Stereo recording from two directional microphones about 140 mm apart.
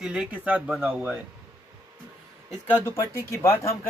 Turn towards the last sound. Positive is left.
turn(degrees=20)  # may be behind; listen again after turning